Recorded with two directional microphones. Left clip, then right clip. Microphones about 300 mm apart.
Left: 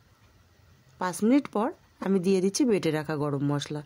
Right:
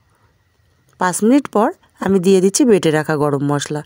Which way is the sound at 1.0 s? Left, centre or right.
Right.